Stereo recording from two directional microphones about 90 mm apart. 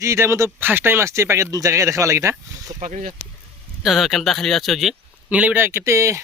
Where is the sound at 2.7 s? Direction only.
45° right (ahead or behind).